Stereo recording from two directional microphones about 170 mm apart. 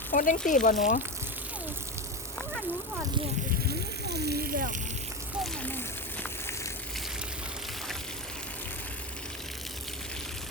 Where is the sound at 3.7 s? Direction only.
75° right (ahead or behind); by 4.8 s 55° right (ahead or behind).